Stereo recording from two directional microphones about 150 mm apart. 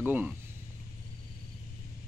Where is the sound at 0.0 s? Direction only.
10° right (ahead or behind).